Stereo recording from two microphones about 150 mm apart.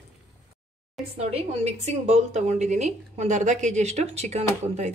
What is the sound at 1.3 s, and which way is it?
A woman's voice, 45° right (ahead or behind).